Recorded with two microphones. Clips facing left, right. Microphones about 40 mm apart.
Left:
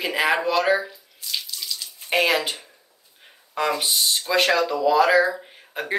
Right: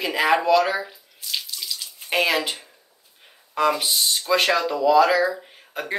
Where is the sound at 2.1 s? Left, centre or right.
Centre.